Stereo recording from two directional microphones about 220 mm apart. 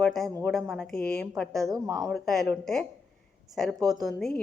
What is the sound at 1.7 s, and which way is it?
Speech, 15° right (ahead or behind).